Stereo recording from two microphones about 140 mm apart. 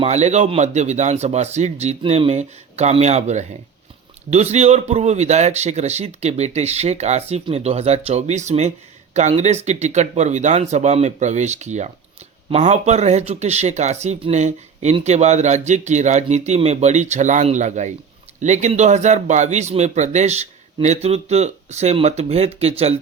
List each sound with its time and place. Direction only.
0.0 s a man's voice: 55° right (ahead or behind)